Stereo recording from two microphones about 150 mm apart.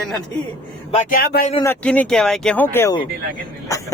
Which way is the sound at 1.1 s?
80° left.